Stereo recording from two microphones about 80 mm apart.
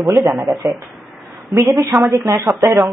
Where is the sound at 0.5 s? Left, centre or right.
Right.